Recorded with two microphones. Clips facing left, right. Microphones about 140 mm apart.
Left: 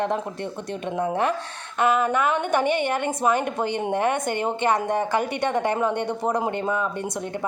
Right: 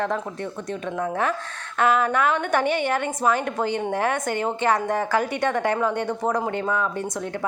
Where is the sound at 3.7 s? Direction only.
15° left (ahead or behind).